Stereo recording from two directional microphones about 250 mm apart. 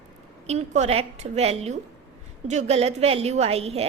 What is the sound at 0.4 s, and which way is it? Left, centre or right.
A woman's voice, right.